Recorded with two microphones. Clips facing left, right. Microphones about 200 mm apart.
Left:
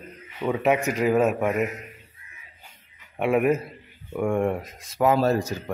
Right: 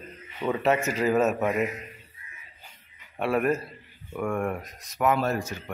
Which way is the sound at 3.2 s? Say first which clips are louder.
Left 4 dB; 20° left (ahead or behind).